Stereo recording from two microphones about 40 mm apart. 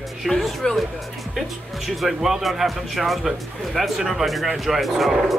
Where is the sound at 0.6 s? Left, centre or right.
Centre.